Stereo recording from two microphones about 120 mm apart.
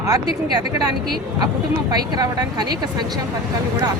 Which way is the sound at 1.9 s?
30° right (ahead or behind).